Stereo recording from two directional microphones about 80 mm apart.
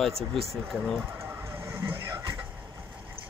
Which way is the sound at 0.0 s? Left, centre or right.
Centre.